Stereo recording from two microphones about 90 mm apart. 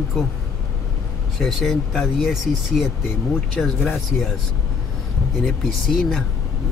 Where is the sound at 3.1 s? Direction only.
15° left (ahead or behind).